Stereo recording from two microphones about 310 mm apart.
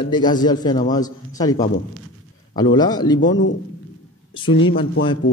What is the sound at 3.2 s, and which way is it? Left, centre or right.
Speech, left.